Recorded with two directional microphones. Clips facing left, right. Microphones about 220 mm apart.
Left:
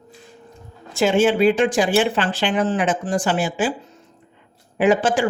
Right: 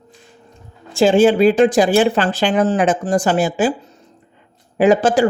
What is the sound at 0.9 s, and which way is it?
Speech, 30° right (ahead or behind).